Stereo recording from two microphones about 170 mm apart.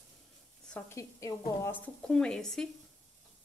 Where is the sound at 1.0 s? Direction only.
15° left (ahead or behind).